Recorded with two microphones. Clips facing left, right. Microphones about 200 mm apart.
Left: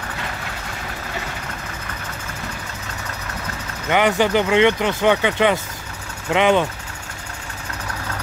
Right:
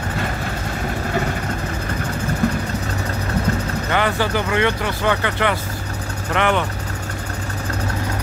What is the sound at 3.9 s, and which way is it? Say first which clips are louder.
Speech: left 4 dB; 15° left (ahead or behind).